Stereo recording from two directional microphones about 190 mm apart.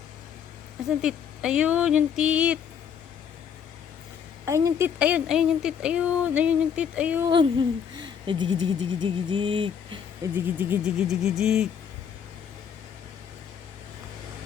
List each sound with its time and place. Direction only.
0.9 s speech: 5° right (ahead or behind)
4.4 s speech: 15° right (ahead or behind)
7.3 s speech: 25° right (ahead or behind)
10.3 s speech: 10° right (ahead or behind)